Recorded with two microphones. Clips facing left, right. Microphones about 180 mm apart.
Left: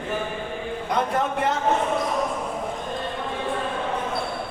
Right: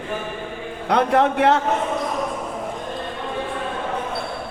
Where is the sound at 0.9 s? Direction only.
70° right (ahead or behind).